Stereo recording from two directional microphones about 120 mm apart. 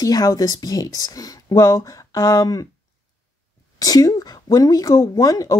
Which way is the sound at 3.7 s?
30° left (ahead or behind).